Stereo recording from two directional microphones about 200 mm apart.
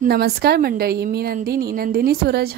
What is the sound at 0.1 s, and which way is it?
A woman's voice, 55° right (ahead or behind).